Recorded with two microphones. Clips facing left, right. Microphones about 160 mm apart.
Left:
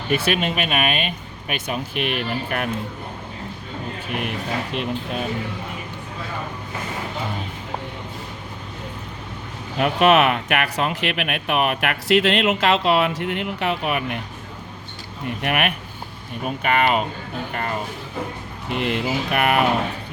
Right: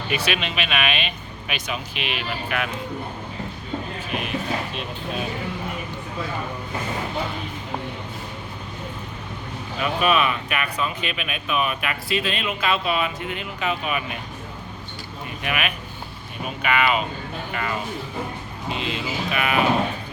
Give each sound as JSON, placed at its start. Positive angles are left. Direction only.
{"t": 0.1, "sound": "speech", "side_deg": 50}
{"t": 4.7, "sound": "speech", "side_deg": 65}
{"t": 9.7, "sound": "speech", "side_deg": 70}
{"t": 15.4, "sound": "speech", "side_deg": 60}
{"t": 16.6, "sound": "speech", "side_deg": 50}
{"t": 18.7, "sound": "speech", "side_deg": 65}